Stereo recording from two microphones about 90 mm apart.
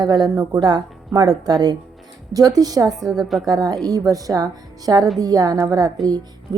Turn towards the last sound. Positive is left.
turn(degrees=-50)  # may be behind; listen again after turning